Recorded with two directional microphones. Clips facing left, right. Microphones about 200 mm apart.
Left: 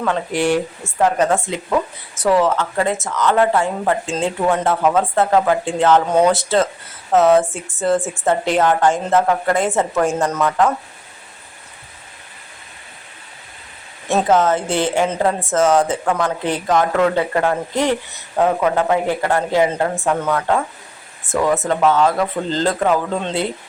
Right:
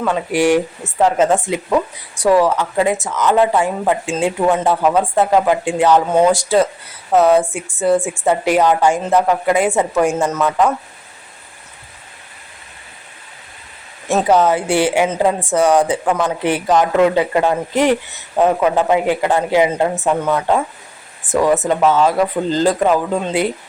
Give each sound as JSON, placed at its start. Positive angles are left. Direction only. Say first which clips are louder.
{"t": 0.0, "sound": "a woman's voice", "louder": "right 3 dB", "side_deg": -10}
{"t": 14.3, "sound": "a woman's voice", "louder": "right 3 dB", "side_deg": -15}